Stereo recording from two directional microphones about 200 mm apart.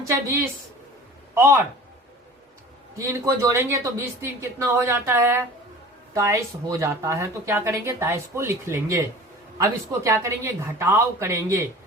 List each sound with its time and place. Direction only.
1.4 s speech: 15° right (ahead or behind)
3.0 s speech: 15° right (ahead or behind)